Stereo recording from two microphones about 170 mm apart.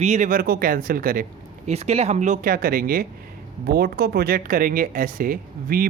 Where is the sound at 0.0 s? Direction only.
45° right (ahead or behind).